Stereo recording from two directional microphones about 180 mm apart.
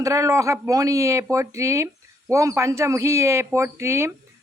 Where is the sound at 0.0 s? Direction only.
15° right (ahead or behind).